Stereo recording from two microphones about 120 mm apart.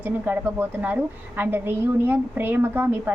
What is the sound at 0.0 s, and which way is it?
A woman's voice, 15° right (ahead or behind).